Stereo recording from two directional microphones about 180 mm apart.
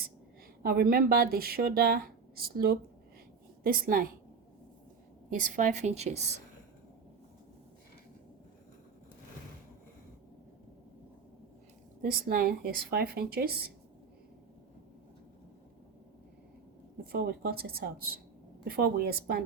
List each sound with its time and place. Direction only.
0.6 s speech: 55° right (ahead or behind)
5.3 s a woman's voice: 45° right (ahead or behind)
12.2 s speech: 55° right (ahead or behind)
17.0 s speech: 60° right (ahead or behind)